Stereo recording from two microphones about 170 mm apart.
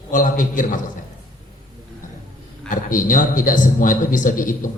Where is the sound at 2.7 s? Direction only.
50° left (ahead or behind).